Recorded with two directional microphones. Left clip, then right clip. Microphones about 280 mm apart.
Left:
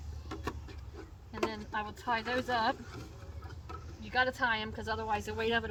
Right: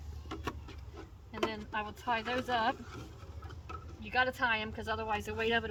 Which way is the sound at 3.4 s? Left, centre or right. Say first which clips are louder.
Right 1 dB; centre.